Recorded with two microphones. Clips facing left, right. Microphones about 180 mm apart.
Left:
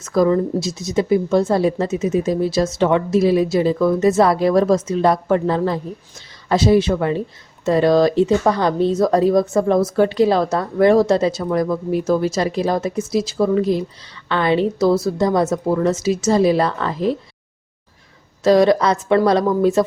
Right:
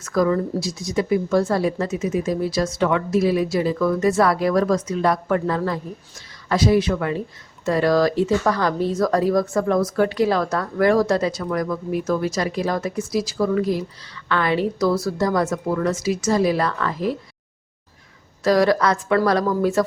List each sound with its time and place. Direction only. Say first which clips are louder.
0.0 s speech: left 4 dB; 25° left (ahead or behind)
18.4 s speech: left 4 dB; 20° left (ahead or behind)